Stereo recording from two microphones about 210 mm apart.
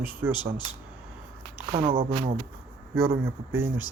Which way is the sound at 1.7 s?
25° right (ahead or behind).